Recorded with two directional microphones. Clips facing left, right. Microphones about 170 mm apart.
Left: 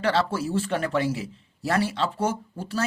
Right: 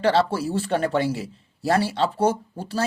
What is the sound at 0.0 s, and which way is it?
Speech, 35° right (ahead or behind).